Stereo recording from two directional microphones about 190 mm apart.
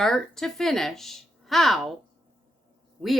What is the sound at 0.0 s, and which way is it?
Speech, centre (ahead or behind).